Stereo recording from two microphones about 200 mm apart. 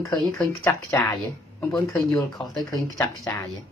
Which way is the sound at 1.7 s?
15° left (ahead or behind).